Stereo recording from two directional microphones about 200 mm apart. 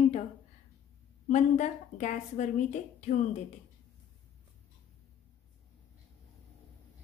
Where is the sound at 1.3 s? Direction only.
35° left (ahead or behind).